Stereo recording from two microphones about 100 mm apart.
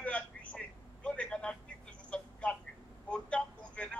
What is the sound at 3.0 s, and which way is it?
Vehicle, 10° left (ahead or behind).